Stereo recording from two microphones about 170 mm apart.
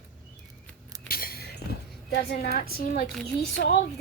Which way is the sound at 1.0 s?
60° left (ahead or behind).